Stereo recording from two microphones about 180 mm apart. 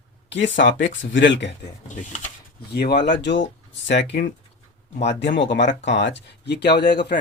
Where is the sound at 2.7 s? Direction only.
65° left (ahead or behind).